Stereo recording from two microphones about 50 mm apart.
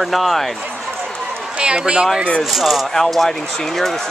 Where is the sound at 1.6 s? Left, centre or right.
Centre.